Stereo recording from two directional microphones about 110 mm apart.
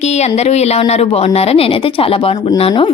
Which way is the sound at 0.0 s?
90° left.